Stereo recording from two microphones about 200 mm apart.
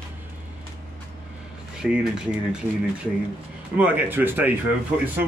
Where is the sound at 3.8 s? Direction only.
10° right (ahead or behind).